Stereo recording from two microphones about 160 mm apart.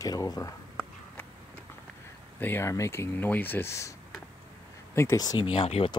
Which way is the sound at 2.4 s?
15° left (ahead or behind).